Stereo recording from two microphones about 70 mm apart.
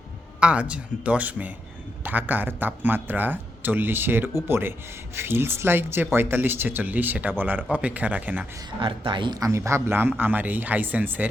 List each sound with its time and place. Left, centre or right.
0.3 s speech: centre
9.2 s speech: right
9.5 s speech: right